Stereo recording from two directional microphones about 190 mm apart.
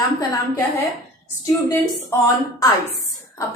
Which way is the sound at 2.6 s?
20° left (ahead or behind).